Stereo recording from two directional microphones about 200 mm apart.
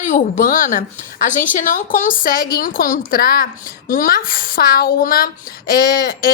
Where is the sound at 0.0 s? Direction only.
40° left (ahead or behind).